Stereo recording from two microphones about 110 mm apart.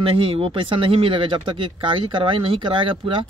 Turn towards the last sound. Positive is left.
turn(degrees=-50)  # may be behind; listen again after turning